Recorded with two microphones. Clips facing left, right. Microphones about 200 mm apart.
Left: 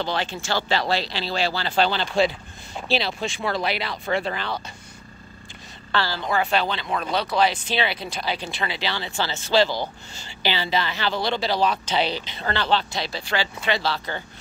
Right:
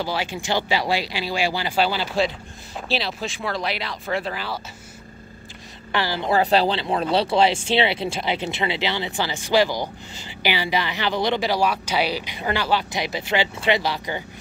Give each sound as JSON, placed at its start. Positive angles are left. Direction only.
{"t": 0.0, "sound": "speech", "side_deg": -10}
{"t": 5.9, "sound": "a woman's voice", "side_deg": -15}
{"t": 6.2, "sound": "speech", "side_deg": -35}